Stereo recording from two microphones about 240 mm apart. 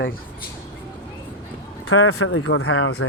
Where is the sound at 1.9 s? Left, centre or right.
Left.